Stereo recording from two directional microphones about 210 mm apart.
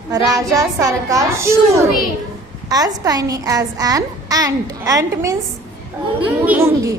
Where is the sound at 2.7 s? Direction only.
20° right (ahead or behind).